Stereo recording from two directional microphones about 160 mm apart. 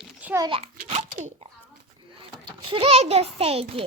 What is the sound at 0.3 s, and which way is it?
A child's voice, 30° right (ahead or behind).